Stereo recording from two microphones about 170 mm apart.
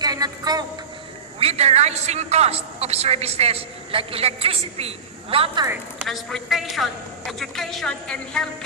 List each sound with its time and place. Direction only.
0.0 s a sound: 20° right (ahead or behind)
1.4 s a man's voice: 35° right (ahead or behind)
6.1 s a woman's voice: centre (ahead or behind)